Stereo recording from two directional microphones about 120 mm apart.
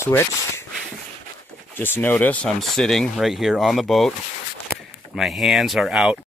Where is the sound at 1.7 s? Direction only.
15° left (ahead or behind).